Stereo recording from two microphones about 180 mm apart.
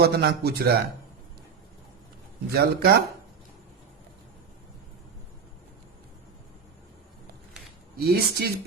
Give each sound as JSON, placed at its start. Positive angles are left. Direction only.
{"t": 0.0, "sound": "a man's voice", "side_deg": -60}
{"t": 2.5, "sound": "a man's voice", "side_deg": -60}
{"t": 7.9, "sound": "a man's voice", "side_deg": -60}